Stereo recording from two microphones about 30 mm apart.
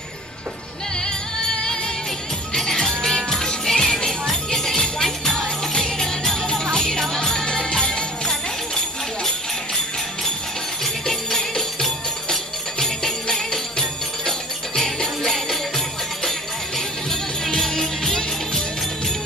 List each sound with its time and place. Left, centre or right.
1.0 s music: left
2.5 s jingle bell: centre
3.6 s music: centre
6.7 s jingle bell: centre
7.4 s music: left
11.1 s music: centre
16.3 s music: centre